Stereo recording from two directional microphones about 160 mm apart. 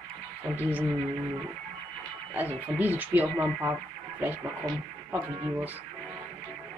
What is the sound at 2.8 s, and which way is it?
Speech, 10° right (ahead or behind).